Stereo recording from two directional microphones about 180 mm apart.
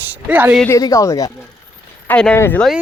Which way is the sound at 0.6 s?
20° left (ahead or behind).